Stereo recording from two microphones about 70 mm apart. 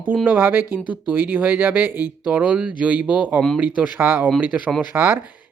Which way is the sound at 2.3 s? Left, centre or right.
Centre.